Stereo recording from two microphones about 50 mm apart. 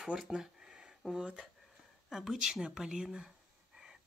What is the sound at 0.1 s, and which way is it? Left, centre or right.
Speech, right.